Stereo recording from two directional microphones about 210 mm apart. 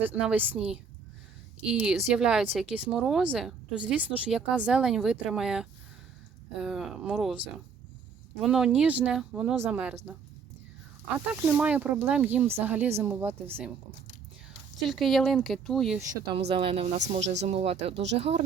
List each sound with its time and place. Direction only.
0.0 s speech: 5° right (ahead or behind)
11.5 s speech: 5° right (ahead or behind)
14.8 s speech: centre (ahead or behind)
16.5 s speech: 25° right (ahead or behind)